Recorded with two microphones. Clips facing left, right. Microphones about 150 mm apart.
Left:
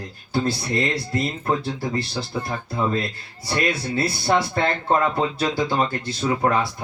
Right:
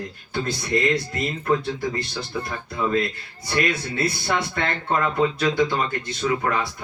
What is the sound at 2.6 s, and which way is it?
Speech, 30° left (ahead or behind).